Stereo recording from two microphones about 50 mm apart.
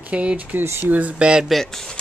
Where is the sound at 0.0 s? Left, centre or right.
Right.